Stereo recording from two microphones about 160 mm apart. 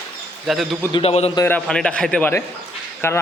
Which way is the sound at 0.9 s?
40° left (ahead or behind).